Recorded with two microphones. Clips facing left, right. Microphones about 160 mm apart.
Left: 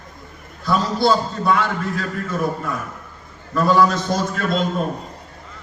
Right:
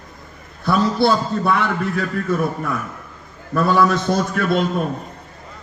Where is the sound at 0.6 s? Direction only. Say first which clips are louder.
Right 1 dB; 60° right (ahead or behind).